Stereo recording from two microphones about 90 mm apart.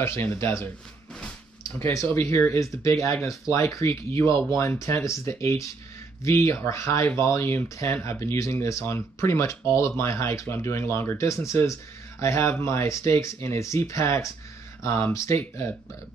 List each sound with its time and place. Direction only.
0.0 s speech: 30° left (ahead or behind)
1.8 s speech: 35° left (ahead or behind)